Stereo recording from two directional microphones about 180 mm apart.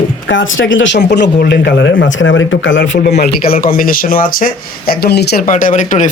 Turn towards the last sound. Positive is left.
turn(degrees=45)  # may be behind; listen again after turning